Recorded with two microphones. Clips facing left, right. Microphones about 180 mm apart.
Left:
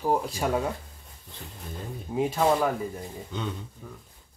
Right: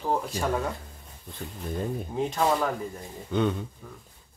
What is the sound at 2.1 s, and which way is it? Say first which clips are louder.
Speech: left 3 dB; 5° left (ahead or behind).